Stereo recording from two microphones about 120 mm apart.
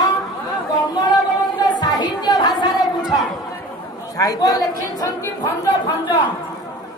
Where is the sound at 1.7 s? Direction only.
35° left (ahead or behind).